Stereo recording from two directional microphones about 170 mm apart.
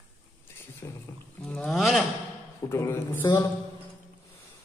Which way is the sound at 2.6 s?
15° left (ahead or behind).